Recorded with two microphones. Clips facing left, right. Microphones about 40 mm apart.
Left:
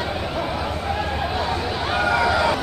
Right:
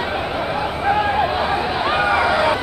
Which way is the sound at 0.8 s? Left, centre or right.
Right.